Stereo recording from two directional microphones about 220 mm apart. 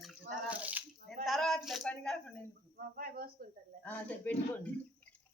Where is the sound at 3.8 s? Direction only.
5° left (ahead or behind).